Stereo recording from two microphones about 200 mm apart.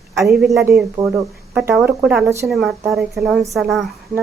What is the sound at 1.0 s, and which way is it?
Speech, 20° right (ahead or behind).